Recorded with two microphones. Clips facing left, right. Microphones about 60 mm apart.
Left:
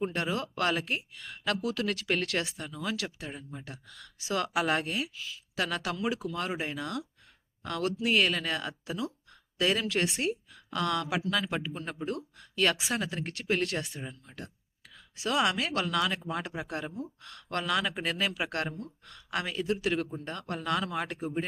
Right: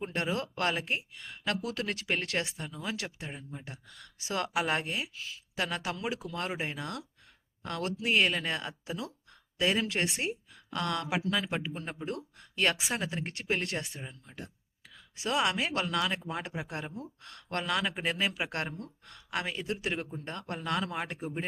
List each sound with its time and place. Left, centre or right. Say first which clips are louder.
0.0 s a woman's voice: left 1 dB; right
13.8 s speech: left 3 dB; centre
14.3 s a man's voice: left 1 dB; centre
15.1 s a woman's voice: left 2 dB; right
17.2 s a woman's voice: left 1 dB; right